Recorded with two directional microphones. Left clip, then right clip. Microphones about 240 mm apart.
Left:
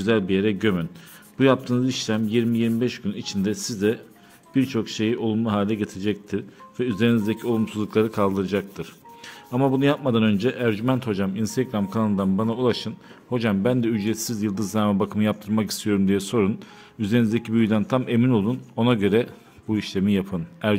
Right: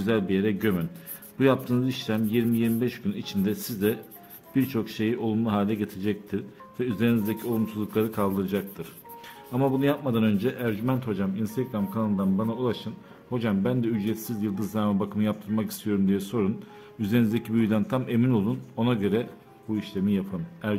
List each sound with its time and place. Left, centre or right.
0.0 s a man's voice: centre